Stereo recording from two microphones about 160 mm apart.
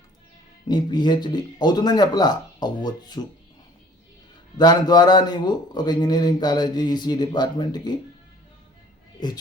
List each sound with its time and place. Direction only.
0.7 s speech: 25° left (ahead or behind)
4.5 s speech: 25° left (ahead or behind)